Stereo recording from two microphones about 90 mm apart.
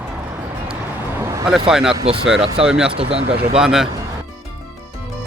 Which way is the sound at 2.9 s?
90° right.